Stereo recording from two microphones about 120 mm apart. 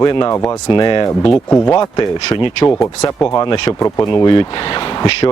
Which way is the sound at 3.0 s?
25° left (ahead or behind).